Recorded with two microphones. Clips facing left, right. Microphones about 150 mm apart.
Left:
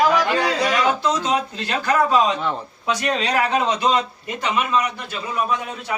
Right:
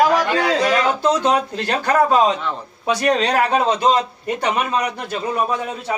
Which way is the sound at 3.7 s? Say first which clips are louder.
Right 3 dB; 30° right (ahead or behind).